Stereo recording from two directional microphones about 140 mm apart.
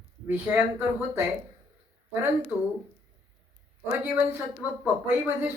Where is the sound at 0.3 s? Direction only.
15° right (ahead or behind).